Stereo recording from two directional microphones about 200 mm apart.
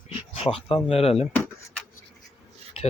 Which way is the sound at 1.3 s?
10° left (ahead or behind).